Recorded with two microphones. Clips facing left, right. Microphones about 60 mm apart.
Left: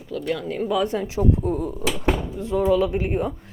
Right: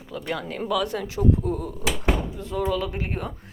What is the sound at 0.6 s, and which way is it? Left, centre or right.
Speech, left.